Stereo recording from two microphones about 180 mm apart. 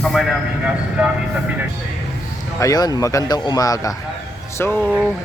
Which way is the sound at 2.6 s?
20° left (ahead or behind).